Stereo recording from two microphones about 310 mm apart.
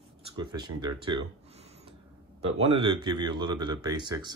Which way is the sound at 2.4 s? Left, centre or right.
Centre.